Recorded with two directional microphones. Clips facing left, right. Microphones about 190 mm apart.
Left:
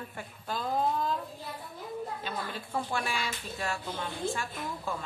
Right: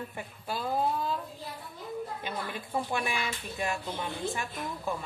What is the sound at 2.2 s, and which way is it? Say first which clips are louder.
Speech: right 1 dB; 15° right (ahead or behind).